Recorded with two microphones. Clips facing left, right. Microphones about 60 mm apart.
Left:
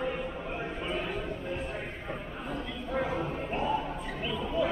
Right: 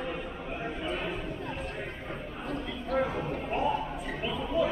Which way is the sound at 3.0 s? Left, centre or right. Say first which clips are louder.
Right 1 dB; centre.